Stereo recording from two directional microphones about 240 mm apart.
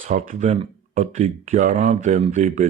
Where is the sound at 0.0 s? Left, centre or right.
Right.